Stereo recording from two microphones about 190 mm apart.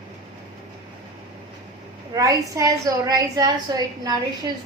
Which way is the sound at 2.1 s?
15° right (ahead or behind).